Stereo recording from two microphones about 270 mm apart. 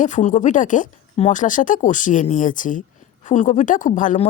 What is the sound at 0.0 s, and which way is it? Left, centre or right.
Speech, left.